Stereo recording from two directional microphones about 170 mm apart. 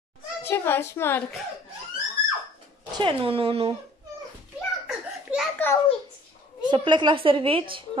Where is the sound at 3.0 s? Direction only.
30° right (ahead or behind).